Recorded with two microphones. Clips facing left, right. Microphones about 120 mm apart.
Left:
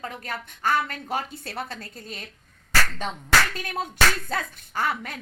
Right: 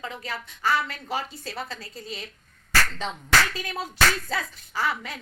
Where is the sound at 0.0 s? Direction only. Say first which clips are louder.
Left 1 dB; 50° left (ahead or behind).